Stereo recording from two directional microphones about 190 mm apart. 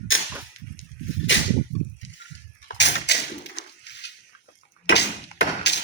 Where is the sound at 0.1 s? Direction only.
90° left.